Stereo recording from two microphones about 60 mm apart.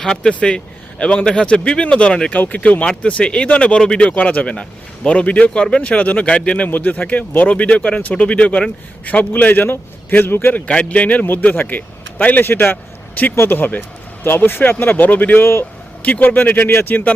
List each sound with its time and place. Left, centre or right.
0.0 s speech: centre
2.3 s speech: left
3.0 s speech: centre
4.1 s speech: left
10.7 s speech: centre